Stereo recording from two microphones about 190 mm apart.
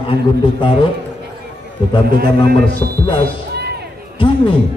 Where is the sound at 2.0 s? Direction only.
55° right (ahead or behind).